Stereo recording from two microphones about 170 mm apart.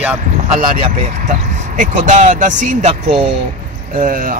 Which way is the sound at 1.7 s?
50° right (ahead or behind).